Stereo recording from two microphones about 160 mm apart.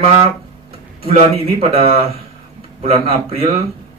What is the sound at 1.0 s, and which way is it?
Speech, 35° right (ahead or behind).